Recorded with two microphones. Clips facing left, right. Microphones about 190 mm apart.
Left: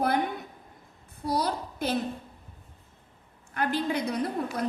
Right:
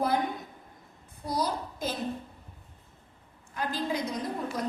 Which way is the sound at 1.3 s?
65° left (ahead or behind).